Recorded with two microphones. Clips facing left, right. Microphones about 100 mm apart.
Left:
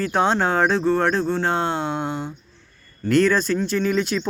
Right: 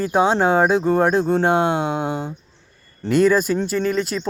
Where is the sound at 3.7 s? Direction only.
5° right (ahead or behind).